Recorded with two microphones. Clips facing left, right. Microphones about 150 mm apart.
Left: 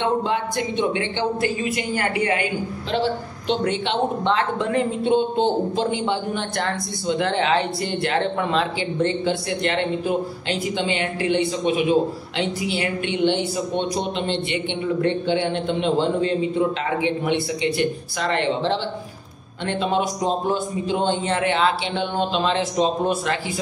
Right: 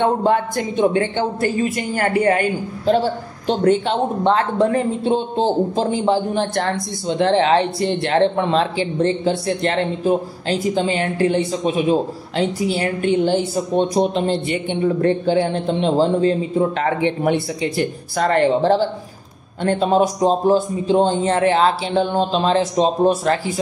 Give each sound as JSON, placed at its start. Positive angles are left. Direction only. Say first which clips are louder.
{"t": 0.0, "sound": "speech", "louder": "right 5 dB", "side_deg": -45}
{"t": 16.8, "sound": "speech", "louder": "right 4 dB", "side_deg": -50}